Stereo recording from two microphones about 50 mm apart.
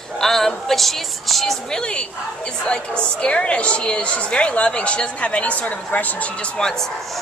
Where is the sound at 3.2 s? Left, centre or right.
Left.